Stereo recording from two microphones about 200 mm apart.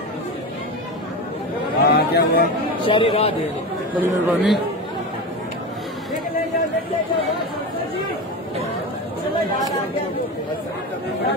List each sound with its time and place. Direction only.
1.8 s a sound: 55° left (ahead or behind)
2.9 s speech: 25° left (ahead or behind)
4.0 s speech: 5° right (ahead or behind)